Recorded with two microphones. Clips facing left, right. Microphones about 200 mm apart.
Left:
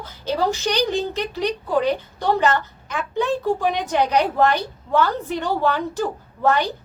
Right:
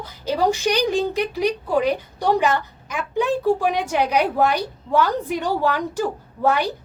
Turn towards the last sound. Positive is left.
turn(degrees=-10)  # may be behind; listen again after turning